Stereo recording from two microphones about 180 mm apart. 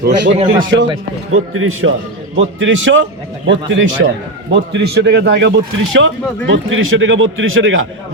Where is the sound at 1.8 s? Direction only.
90° right.